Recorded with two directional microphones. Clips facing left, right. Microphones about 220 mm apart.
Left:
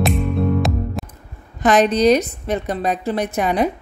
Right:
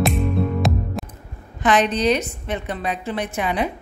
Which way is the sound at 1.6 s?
40° left (ahead or behind).